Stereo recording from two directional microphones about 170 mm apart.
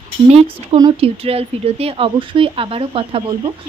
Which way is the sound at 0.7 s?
30° right (ahead or behind).